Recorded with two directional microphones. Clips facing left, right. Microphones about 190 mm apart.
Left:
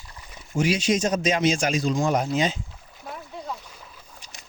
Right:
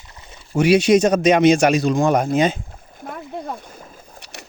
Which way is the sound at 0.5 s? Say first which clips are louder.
Right 9 dB; 65° right (ahead or behind).